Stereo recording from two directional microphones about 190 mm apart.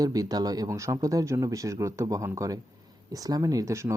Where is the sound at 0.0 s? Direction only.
20° right (ahead or behind).